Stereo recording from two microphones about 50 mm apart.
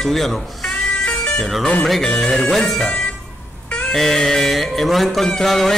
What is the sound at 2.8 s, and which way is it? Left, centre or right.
Speech, centre.